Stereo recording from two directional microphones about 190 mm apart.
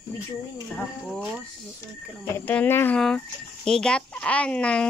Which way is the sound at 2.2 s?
10° left (ahead or behind).